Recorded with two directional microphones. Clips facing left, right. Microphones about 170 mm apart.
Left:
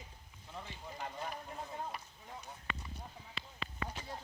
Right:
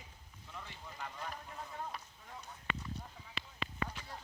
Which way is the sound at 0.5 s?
25° left (ahead or behind).